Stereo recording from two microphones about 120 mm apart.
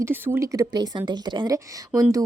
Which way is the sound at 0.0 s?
20° right (ahead or behind).